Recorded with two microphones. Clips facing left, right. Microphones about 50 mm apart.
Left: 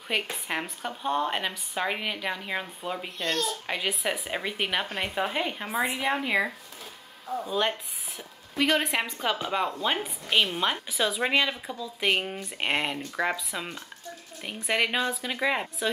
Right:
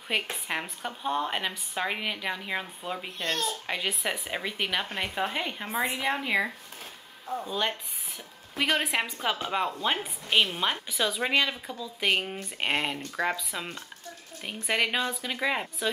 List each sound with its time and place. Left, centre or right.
0.1 s speech: centre